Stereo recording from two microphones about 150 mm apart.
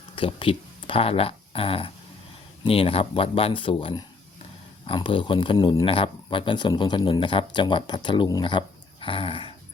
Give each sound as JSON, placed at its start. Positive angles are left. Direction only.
{"t": 0.2, "sound": "speech", "side_deg": 35}